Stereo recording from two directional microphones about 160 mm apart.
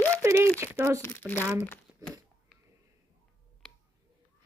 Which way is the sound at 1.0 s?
15° left (ahead or behind).